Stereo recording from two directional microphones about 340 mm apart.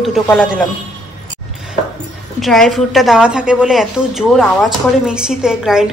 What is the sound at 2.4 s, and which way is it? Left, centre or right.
A woman's voice, centre.